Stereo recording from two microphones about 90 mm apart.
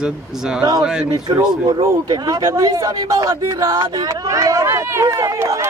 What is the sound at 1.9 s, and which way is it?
Speech, 45° right (ahead or behind).